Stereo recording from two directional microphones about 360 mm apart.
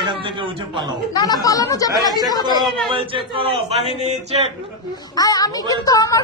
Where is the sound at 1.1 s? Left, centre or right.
Centre.